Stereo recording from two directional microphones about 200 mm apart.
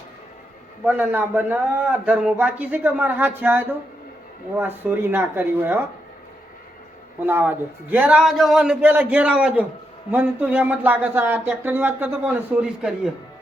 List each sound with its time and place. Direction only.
0.9 s a man's voice: 10° right (ahead or behind)
7.3 s a man's voice: 10° right (ahead or behind)